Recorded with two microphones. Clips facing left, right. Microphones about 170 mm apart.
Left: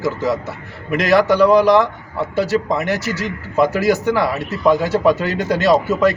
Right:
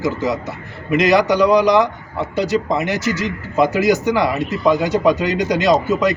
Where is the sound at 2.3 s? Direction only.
5° left (ahead or behind).